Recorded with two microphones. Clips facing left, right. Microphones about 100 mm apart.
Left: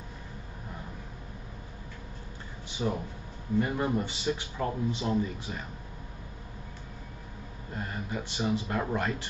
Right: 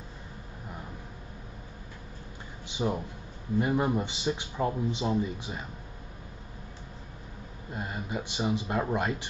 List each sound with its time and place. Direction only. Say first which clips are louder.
2.7 s speech: right 1 dB; 20° right (ahead or behind)
7.7 s speech: right 1 dB; 15° right (ahead or behind)